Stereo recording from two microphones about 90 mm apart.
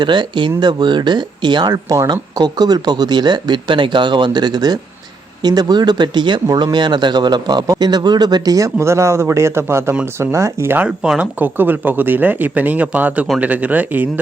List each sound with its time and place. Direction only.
0.0 s speech: 60° right (ahead or behind); by 10.8 s 30° right (ahead or behind)
10.8 s speech: 10° right (ahead or behind)